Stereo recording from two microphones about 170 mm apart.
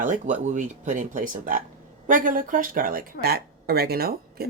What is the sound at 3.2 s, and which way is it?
Speech, 65° right (ahead or behind).